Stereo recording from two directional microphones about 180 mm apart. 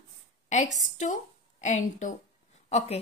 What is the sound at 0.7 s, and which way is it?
A woman's voice, 45° left (ahead or behind).